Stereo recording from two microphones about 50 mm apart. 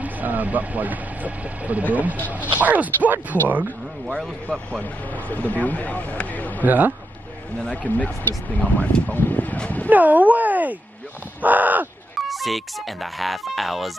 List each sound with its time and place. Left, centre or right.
0.0 s speech: right
5.1 s speech: left
6.6 s speech: right
7.7 s speech: left
9.8 s speech: right
11.4 s crow: right
12.2 s speech: centre